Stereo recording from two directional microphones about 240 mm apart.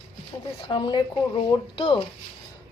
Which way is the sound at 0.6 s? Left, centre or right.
Centre.